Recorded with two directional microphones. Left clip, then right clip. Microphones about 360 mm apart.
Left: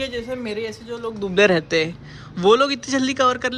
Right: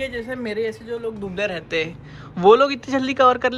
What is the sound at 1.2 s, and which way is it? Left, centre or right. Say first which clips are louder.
Speech: left 14 dB; left.